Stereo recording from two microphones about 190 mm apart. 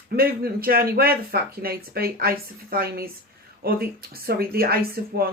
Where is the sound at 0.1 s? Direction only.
55° right (ahead or behind).